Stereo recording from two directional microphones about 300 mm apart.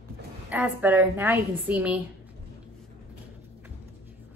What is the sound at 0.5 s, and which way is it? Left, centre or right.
A woman's voice, centre.